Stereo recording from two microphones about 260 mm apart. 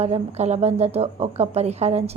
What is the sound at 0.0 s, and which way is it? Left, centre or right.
A woman's voice, right.